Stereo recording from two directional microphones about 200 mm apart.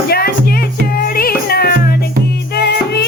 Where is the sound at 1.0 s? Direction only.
45° left (ahead or behind).